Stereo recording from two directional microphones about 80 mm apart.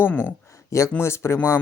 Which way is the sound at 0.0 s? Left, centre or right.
Left.